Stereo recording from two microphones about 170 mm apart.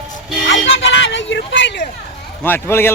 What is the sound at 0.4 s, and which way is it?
Music, 90° left.